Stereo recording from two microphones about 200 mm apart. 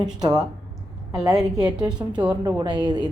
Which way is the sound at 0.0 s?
20° right (ahead or behind).